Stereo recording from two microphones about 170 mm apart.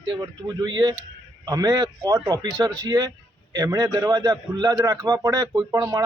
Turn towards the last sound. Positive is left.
turn(degrees=-15)  # may be behind; listen again after turning